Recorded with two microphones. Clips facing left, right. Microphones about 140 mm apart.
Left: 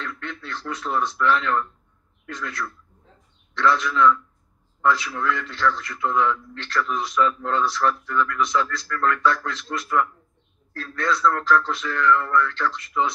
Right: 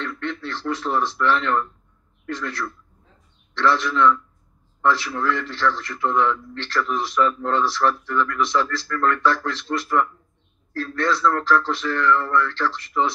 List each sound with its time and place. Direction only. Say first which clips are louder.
0.0 s a man's voice: right 5 dB; 30° right (ahead or behind)